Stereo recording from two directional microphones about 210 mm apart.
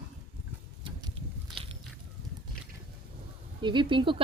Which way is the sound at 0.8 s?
20° right (ahead or behind).